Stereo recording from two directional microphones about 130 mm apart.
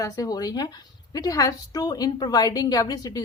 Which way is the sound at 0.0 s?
30° left (ahead or behind).